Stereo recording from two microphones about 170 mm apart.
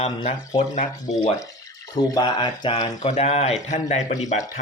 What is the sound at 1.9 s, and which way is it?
Speech, 20° left (ahead or behind).